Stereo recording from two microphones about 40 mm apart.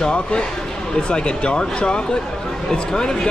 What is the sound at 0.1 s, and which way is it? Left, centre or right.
Speech, left.